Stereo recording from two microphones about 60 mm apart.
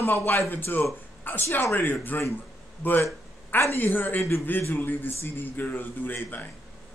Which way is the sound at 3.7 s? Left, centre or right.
Left.